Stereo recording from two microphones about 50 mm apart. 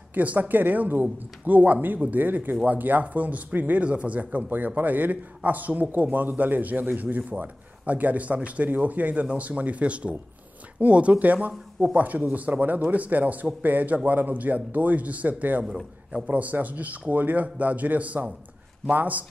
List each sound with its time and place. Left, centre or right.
0.1 s a man's voice: right
15.6 s a man's voice: centre
16.3 s a man's voice: right